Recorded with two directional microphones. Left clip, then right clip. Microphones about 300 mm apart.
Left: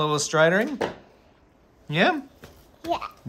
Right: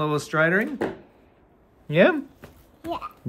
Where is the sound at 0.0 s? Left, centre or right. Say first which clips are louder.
Left 2 dB; centre.